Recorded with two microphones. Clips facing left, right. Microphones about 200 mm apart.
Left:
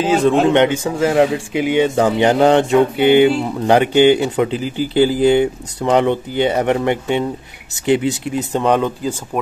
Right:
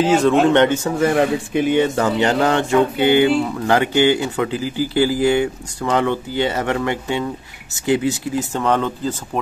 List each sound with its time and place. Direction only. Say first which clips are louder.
0.3 s speech: left 1 dB; 15° left (ahead or behind)